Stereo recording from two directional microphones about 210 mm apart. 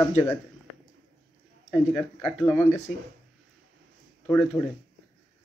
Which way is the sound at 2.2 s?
10° left (ahead or behind).